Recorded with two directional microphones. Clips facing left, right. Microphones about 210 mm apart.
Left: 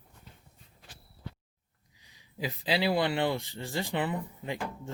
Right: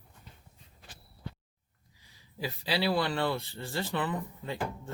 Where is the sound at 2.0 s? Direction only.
20° left (ahead or behind).